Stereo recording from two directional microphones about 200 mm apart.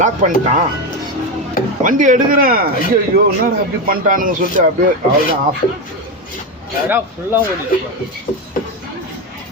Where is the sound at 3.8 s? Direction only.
45° right (ahead or behind).